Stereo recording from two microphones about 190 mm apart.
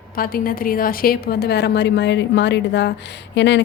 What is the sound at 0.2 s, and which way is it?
A woman's voice, 50° left (ahead or behind).